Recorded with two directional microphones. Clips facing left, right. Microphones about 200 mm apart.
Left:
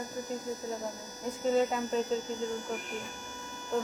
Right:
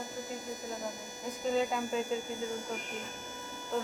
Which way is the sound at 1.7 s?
Centre (ahead or behind).